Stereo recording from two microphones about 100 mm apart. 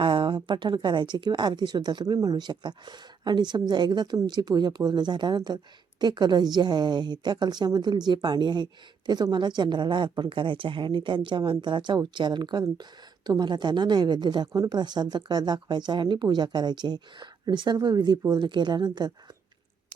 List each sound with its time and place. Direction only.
0.0 s a woman's voice: 55° right (ahead or behind)